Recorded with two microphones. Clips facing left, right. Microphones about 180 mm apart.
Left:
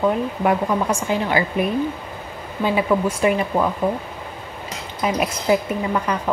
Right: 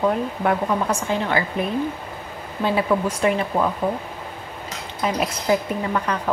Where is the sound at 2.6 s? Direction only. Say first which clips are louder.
Left 1 dB; 5° left (ahead or behind).